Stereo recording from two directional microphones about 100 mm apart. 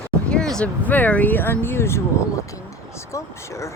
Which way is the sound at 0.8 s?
15° left (ahead or behind).